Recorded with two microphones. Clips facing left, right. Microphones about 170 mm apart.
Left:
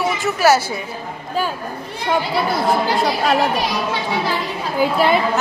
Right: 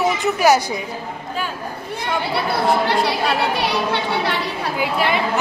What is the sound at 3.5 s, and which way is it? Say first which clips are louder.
Speech: right 1 dB; 65° right (ahead or behind).